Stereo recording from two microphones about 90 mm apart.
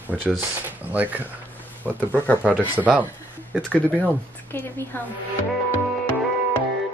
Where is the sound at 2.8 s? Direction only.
15° right (ahead or behind).